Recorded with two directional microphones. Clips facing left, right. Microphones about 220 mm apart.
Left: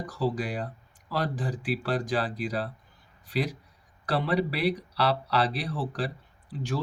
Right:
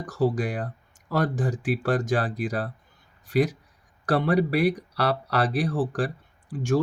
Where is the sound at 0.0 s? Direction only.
45° right (ahead or behind).